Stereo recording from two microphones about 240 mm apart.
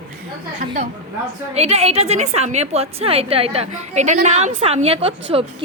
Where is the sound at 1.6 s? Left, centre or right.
Right.